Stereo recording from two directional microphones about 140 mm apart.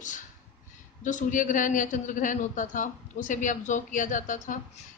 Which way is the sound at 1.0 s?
65° left (ahead or behind).